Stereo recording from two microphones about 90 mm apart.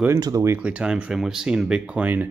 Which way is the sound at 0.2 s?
35° right (ahead or behind).